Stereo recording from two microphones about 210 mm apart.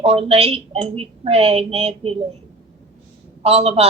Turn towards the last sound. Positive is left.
turn(degrees=-30)  # may be behind; listen again after turning